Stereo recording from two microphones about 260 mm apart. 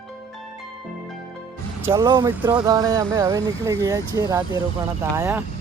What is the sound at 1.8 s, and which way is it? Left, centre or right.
Speech, centre.